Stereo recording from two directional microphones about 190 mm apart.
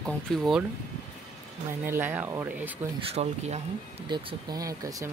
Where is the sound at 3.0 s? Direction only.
35° right (ahead or behind).